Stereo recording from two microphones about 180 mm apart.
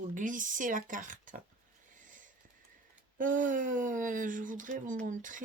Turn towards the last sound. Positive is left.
turn(degrees=-45)  # may be behind; listen again after turning